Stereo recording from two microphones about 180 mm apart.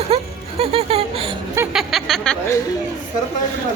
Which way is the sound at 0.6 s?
35° right (ahead or behind).